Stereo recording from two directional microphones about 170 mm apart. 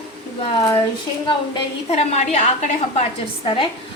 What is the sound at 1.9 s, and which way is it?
Speech, 40° left (ahead or behind).